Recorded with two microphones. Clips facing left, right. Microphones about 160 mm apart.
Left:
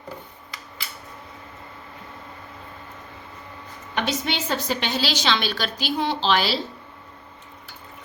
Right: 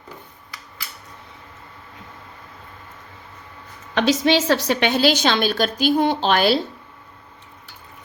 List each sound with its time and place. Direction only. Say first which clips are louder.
3.9 s a woman's voice: right 8 dB; 90° right; by 6.6 s 50° right (ahead or behind)